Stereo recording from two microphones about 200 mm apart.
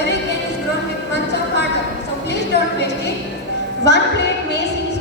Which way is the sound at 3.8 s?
60° left (ahead or behind).